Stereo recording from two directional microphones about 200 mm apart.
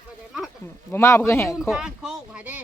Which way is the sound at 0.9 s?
15° left (ahead or behind).